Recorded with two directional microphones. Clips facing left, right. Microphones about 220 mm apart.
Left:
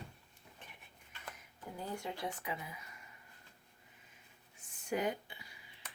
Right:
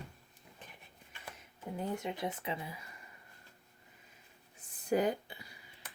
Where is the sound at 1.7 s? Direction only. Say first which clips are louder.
Right 5 dB; 20° right (ahead or behind).